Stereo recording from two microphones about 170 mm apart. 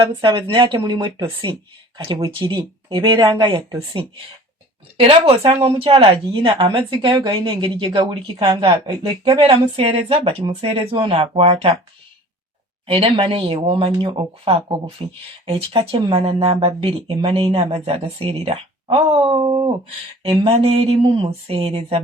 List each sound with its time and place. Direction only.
0.2 s a woman's voice: 30° right (ahead or behind)
4.9 s a woman's voice: 35° right (ahead or behind)
12.9 s speech: 35° right (ahead or behind)